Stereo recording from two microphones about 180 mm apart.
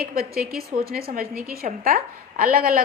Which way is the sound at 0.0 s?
55° right (ahead or behind).